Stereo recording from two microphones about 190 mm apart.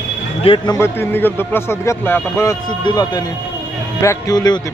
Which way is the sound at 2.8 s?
20° left (ahead or behind).